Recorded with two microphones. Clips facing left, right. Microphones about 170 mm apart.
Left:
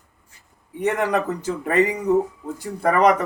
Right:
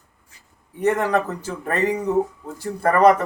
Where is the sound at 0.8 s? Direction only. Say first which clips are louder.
Right 1 dB; 15° left (ahead or behind).